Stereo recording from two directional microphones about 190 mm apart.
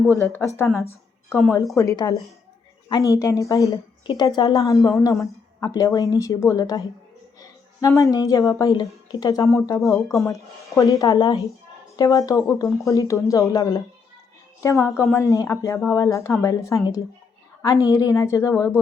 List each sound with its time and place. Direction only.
0.2 s a woman's voice: 15° left (ahead or behind)